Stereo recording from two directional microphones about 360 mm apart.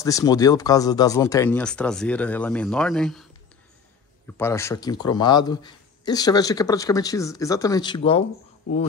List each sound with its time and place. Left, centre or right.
0.0 s speech: centre
4.3 s a man's voice: centre